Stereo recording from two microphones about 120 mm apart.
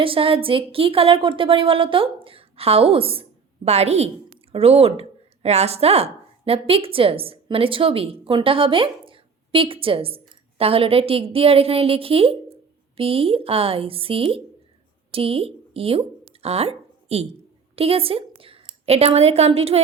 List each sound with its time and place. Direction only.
0.0 s a woman's voice: 50° right (ahead or behind)